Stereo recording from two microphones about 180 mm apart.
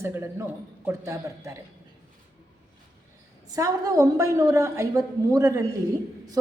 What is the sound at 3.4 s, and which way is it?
A woman's voice, 20° right (ahead or behind).